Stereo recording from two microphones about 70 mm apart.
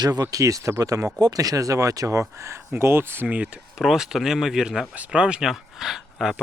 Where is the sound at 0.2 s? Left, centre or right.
Right.